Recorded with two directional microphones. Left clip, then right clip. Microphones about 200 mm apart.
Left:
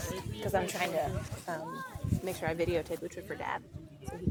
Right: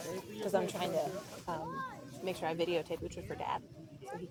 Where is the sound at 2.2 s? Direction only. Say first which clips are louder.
Left 2 dB; 10° left (ahead or behind).